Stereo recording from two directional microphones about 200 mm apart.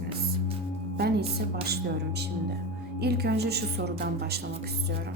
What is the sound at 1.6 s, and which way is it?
Speech, 55° right (ahead or behind).